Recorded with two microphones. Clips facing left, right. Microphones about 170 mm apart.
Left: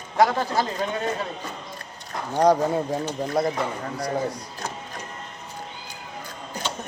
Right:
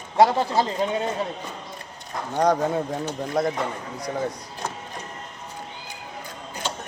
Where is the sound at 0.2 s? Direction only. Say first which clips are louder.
Right 2 dB; 30° right (ahead or behind).